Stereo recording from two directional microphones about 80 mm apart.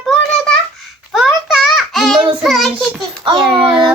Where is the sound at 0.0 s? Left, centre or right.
Centre.